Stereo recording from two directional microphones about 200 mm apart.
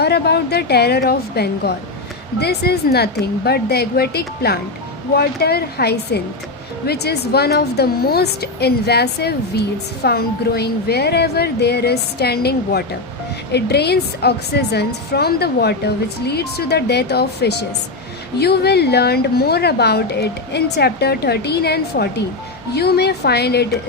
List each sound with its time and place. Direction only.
0.0 s a woman's voice: 55° left (ahead or behind)